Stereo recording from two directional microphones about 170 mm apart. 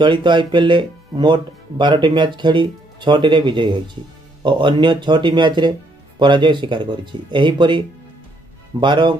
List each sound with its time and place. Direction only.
0.0 s speech: 25° right (ahead or behind)